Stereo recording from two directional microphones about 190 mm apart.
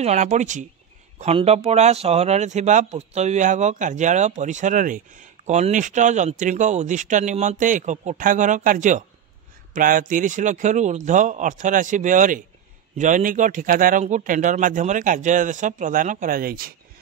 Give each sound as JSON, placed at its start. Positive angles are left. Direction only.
{"t": 0.0, "sound": "a man's voice", "side_deg": -35}